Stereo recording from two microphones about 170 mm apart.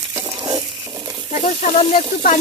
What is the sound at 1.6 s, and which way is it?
Sizzle, 40° left (ahead or behind).